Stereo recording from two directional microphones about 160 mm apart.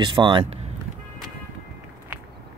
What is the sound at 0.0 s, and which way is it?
Speech, 30° right (ahead or behind).